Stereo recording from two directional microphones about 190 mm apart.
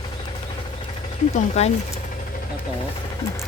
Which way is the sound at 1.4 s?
35° left (ahead or behind).